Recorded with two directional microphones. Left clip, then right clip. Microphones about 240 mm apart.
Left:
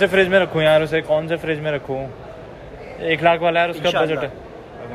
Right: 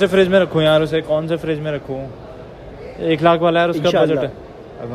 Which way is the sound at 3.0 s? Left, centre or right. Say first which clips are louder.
Right 2 dB; centre.